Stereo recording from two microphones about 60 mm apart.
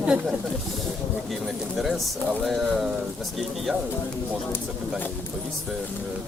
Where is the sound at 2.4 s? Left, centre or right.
Centre.